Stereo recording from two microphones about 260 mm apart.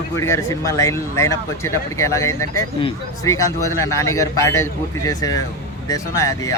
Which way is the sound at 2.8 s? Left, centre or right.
Centre.